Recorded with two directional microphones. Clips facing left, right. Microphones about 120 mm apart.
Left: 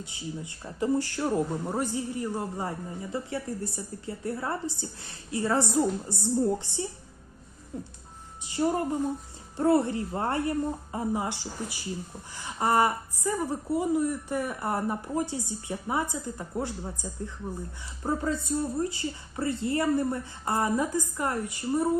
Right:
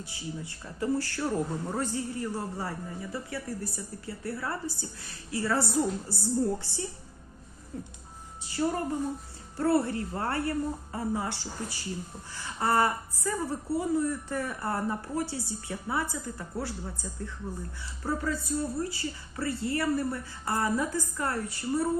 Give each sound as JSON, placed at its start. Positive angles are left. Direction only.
{"t": 0.0, "sound": "a woman's voice", "side_deg": 20}
{"t": 8.4, "sound": "a woman's voice", "side_deg": 20}